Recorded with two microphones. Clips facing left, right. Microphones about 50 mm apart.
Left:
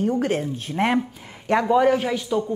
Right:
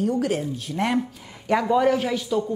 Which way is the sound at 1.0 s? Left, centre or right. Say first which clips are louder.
Left 1 dB; centre.